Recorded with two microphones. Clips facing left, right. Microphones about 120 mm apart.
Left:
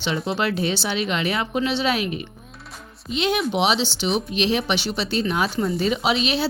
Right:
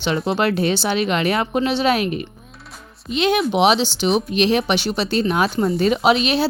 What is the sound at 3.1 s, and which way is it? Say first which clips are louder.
Speech: right 4 dB; 60° right (ahead or behind).